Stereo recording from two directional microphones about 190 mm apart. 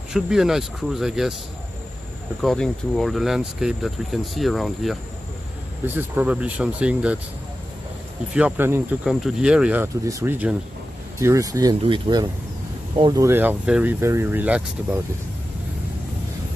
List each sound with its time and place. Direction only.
0.1 s speech: centre (ahead or behind)
2.4 s speech: centre (ahead or behind)
5.9 s speech: 10° right (ahead or behind)
8.4 s speech: 10° right (ahead or behind)